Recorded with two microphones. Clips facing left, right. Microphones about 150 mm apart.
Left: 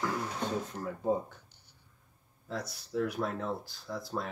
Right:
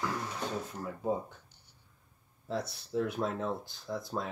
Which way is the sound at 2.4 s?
30° right (ahead or behind).